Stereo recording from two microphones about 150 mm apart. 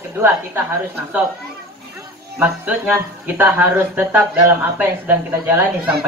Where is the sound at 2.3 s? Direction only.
15° right (ahead or behind).